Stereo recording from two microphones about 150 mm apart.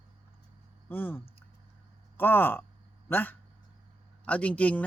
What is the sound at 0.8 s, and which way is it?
Speech, 15° left (ahead or behind).